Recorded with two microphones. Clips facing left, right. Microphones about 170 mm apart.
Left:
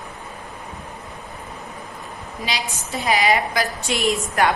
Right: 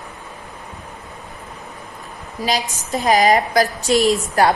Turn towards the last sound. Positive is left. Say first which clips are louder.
# right 4 dB
turn(degrees=-35)  # may be behind; listen again after turning